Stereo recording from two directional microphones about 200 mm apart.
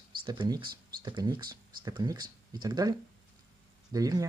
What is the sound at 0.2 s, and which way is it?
Speech, 20° right (ahead or behind).